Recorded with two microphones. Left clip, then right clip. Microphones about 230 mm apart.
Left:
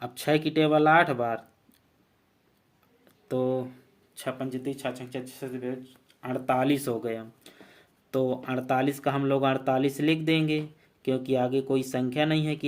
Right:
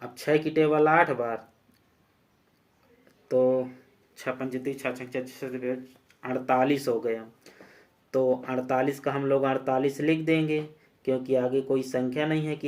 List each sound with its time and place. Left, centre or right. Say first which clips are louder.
0.0 s speech: right 1 dB; left
3.2 s speech: right 5 dB; left